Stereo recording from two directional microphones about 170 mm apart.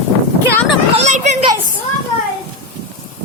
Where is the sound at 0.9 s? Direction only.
40° right (ahead or behind).